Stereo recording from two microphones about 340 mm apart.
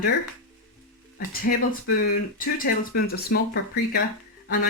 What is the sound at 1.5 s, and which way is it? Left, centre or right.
Speech, left.